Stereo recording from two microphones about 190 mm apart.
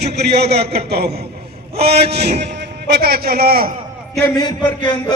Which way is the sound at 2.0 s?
60° right (ahead or behind).